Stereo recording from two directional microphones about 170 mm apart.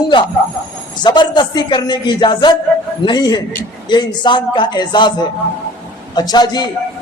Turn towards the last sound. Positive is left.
turn(degrees=25)  # may be behind; listen again after turning